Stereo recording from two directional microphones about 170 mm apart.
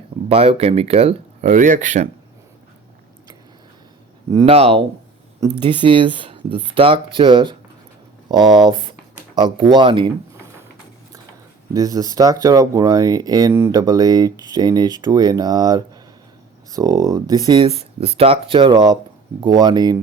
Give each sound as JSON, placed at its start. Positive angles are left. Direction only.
{"t": 0.3, "sound": "speech", "side_deg": -35}
{"t": 4.4, "sound": "speech", "side_deg": -35}
{"t": 8.3, "sound": "a sound", "side_deg": -25}
{"t": 9.6, "sound": "speech", "side_deg": -30}
{"t": 11.7, "sound": "speech", "side_deg": -20}